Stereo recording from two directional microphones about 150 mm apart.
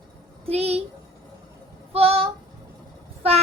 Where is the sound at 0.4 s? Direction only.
45° right (ahead or behind).